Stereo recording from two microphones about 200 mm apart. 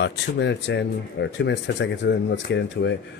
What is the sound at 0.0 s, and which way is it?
Speech, 60° left (ahead or behind).